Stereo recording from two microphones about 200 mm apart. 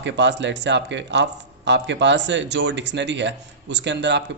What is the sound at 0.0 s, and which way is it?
Speech, 60° right (ahead or behind).